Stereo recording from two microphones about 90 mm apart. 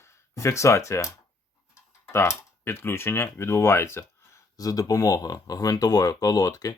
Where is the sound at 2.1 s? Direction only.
25° left (ahead or behind).